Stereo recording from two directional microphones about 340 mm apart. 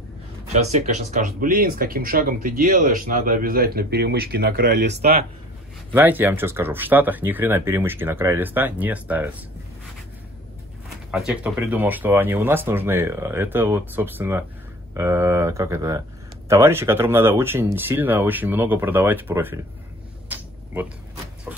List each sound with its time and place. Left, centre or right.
0.5 s speech: centre
5.9 s speech: centre
11.1 s speech: centre
21.5 s a sound: centre